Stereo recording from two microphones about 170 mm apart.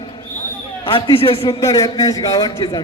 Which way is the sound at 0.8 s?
30° left (ahead or behind).